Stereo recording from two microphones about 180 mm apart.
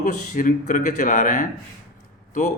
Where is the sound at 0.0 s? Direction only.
45° left (ahead or behind).